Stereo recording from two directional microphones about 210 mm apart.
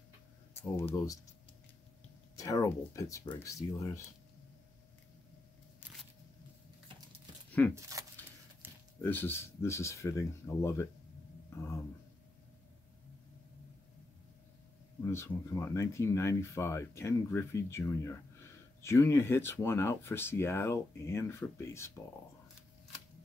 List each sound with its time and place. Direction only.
0.6 s speech: 10° left (ahead or behind)
2.3 s speech: 15° left (ahead or behind)
7.9 s speech: 15° right (ahead or behind)
8.6 s a sound: 10° right (ahead or behind)
9.0 s speech: 10° left (ahead or behind)
15.0 s speech: 15° left (ahead or behind)